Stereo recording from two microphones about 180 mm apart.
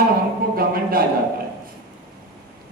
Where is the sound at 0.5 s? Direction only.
55° right (ahead or behind).